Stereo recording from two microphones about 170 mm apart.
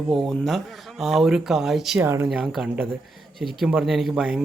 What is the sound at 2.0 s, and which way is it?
Speech, 15° right (ahead or behind).